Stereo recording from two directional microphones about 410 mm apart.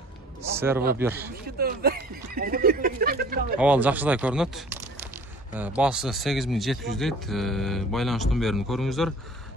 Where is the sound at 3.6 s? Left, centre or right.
Centre.